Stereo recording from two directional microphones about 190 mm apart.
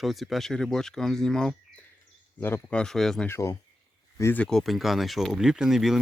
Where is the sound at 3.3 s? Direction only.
15° left (ahead or behind).